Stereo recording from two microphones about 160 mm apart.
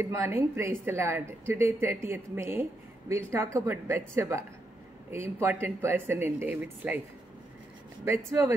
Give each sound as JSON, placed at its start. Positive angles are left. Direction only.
{"t": 0.0, "sound": "speech", "side_deg": -15}
{"t": 8.0, "sound": "speech", "side_deg": -15}